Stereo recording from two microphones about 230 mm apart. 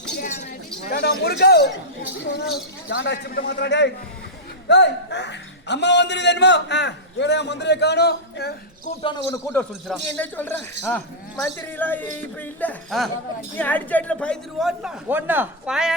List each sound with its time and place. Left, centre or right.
0.2 s chink: left
0.9 s a man's voice: left
9.0 s speech: centre